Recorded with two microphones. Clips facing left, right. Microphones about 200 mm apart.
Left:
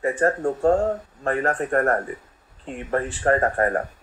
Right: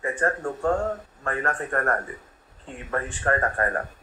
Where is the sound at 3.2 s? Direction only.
30° left (ahead or behind).